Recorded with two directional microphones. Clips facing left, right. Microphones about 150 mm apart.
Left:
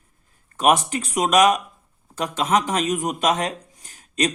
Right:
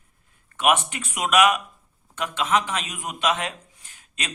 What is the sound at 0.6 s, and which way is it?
Speech, 35° left (ahead or behind).